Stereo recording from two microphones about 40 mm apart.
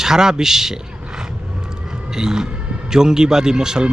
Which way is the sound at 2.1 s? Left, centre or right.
Centre.